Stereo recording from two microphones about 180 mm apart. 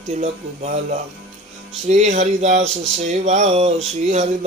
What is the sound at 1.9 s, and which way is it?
Speech, 40° right (ahead or behind).